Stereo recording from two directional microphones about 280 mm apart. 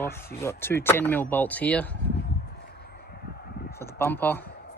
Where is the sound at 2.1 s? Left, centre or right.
Left.